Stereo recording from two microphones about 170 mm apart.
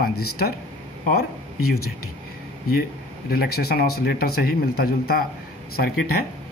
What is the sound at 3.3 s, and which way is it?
A man's voice, 65° left (ahead or behind).